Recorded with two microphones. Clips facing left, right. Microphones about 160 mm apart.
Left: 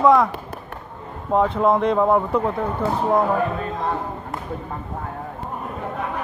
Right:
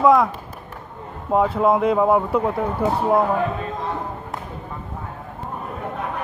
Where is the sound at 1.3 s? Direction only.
5° right (ahead or behind).